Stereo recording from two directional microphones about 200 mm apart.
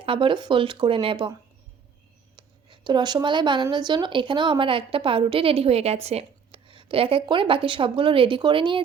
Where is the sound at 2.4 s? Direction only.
20° right (ahead or behind).